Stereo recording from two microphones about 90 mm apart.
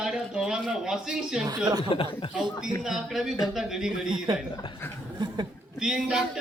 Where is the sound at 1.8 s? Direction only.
80° left.